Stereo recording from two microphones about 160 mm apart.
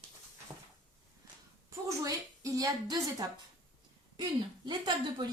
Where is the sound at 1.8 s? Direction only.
20° right (ahead or behind).